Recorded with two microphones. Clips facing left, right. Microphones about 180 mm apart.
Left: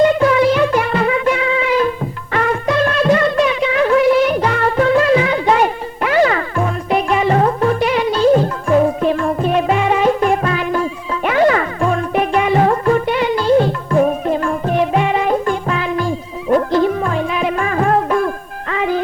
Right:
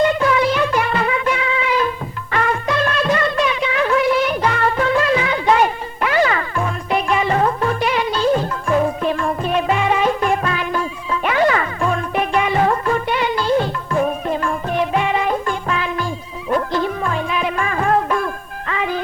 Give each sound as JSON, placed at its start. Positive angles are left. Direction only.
{"t": 0.2, "sound": "music", "side_deg": 45}